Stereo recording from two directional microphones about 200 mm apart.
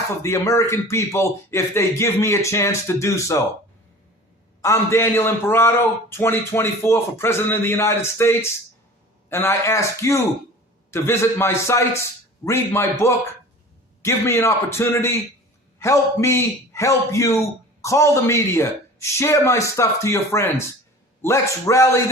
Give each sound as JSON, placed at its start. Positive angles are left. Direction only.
{"t": 0.2, "sound": "a man's voice", "side_deg": 15}
{"t": 4.6, "sound": "a man's voice", "side_deg": 15}